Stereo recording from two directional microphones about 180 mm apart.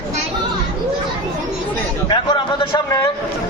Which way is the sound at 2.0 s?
25° left (ahead or behind).